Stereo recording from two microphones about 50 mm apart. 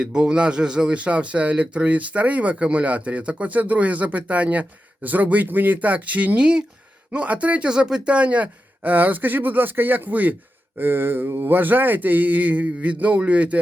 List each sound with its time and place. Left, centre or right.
0.0 s speech: centre
7.7 s speech: centre; by 10.3 s right
10.8 s speech: right